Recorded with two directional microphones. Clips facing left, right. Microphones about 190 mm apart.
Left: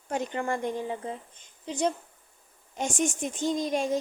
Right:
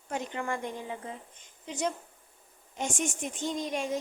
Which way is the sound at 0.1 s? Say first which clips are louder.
Left 4 dB; 35° left (ahead or behind).